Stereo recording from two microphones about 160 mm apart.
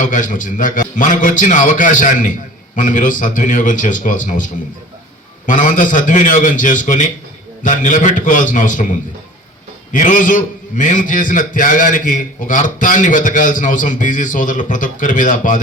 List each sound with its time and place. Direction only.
0.0 s a man's voice: 55° left (ahead or behind)
5.5 s a man's voice: 55° left (ahead or behind)